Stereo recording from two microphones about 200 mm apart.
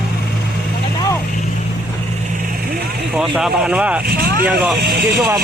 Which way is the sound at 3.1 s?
5° right (ahead or behind).